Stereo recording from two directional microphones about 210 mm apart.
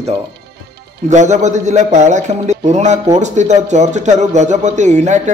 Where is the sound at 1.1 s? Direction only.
35° right (ahead or behind).